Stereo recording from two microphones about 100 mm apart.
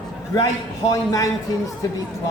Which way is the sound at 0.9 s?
35° left (ahead or behind).